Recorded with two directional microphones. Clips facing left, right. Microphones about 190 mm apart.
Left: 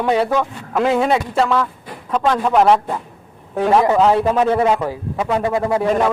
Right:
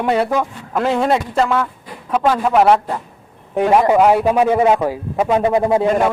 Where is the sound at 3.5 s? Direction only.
15° right (ahead or behind).